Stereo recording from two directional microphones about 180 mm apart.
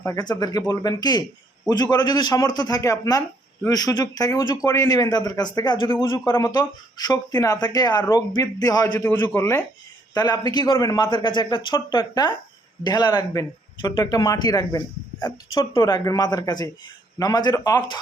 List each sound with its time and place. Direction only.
0.0 s speech: 15° left (ahead or behind)